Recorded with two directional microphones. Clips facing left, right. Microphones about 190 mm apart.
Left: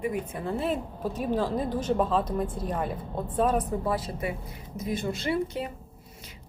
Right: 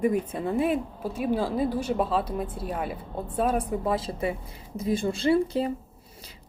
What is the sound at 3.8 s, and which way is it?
A woman's voice, 25° right (ahead or behind).